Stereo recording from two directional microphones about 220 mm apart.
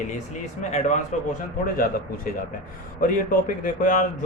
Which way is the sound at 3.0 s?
40° left (ahead or behind).